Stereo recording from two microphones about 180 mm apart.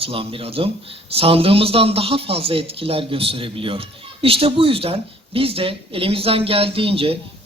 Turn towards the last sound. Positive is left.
turn(degrees=-30)  # may be behind; listen again after turning